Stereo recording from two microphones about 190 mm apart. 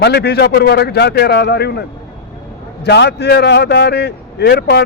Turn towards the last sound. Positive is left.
turn(degrees=60)  # may be behind; listen again after turning